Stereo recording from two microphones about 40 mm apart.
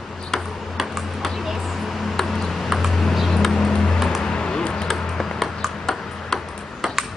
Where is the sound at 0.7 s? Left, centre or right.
Centre; by 4.9 s left.